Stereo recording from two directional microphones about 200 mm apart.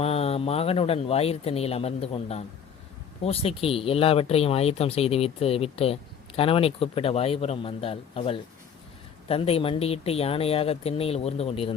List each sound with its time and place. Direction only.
0.0 s speech: 30° left (ahead or behind)